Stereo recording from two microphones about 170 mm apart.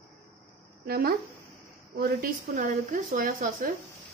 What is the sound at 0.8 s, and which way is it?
Speech, 60° right (ahead or behind).